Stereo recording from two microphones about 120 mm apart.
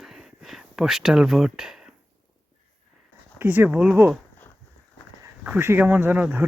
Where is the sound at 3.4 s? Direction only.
15° right (ahead or behind).